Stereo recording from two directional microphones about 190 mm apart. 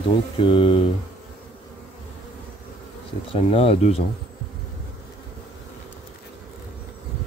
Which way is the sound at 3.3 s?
30° left (ahead or behind).